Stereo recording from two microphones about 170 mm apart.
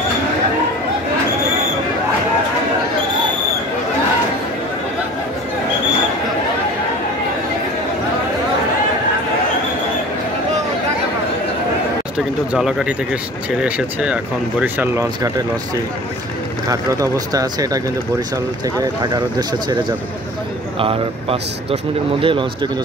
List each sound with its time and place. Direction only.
12.5 s speech: centre (ahead or behind); by 19.8 s 25° right (ahead or behind)
20.8 s speech: 35° right (ahead or behind)